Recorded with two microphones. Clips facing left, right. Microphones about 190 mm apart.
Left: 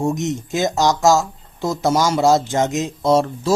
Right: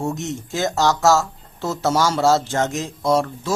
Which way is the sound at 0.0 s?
15° left (ahead or behind).